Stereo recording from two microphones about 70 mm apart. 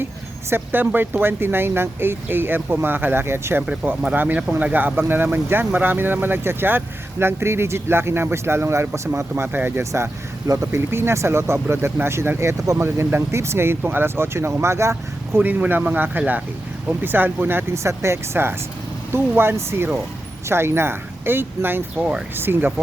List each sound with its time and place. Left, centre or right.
0.5 s speech: right
4.1 s speech: right
9.3 s speech: right
9.9 s speech: right
15.4 s speech: right
17.8 s speech: right
21.9 s speech: centre
22.4 s speech: right